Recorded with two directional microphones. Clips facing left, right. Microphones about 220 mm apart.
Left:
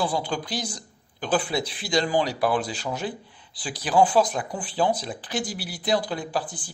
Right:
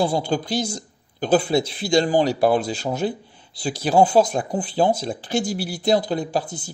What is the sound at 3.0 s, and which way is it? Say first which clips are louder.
Speech: right 7 dB; 45° right (ahead or behind).